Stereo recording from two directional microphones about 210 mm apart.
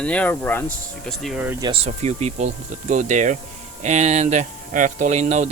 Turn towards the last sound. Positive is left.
turn(degrees=-35)  # may be behind; listen again after turning